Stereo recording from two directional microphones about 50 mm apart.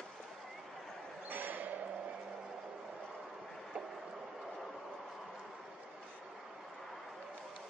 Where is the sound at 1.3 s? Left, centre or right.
Right.